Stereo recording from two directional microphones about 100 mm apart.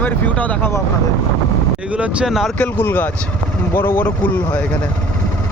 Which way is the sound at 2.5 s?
15° left (ahead or behind).